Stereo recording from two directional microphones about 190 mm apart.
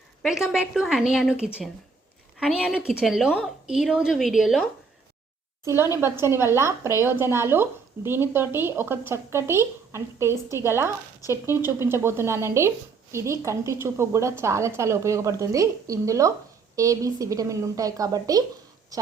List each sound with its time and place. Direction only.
0.2 s a woman's voice: centre (ahead or behind)
5.6 s speech: 15° right (ahead or behind)